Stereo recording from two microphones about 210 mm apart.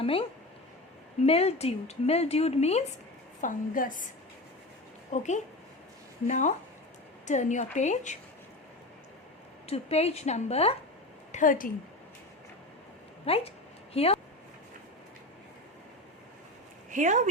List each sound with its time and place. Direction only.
0.0 s a woman's voice: 25° left (ahead or behind)
5.1 s a woman's voice: 35° left (ahead or behind)
9.6 s a woman's voice: 30° left (ahead or behind)
13.2 s speech: 30° left (ahead or behind)
16.9 s speech: 35° right (ahead or behind)